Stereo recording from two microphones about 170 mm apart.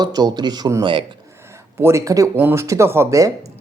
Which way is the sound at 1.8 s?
15° right (ahead or behind).